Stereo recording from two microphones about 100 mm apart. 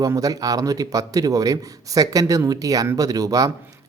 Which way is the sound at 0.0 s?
35° right (ahead or behind).